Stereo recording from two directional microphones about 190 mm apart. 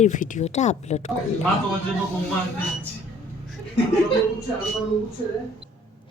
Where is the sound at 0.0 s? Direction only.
40° left (ahead or behind).